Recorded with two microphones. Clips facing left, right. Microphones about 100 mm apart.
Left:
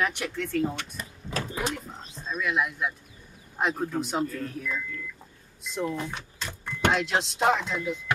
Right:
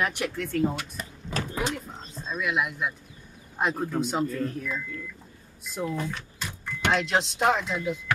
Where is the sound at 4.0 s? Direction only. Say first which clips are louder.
Right 2 dB; centre (ahead or behind).